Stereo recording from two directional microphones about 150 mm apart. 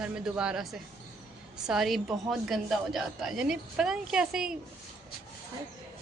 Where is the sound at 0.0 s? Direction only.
5° right (ahead or behind).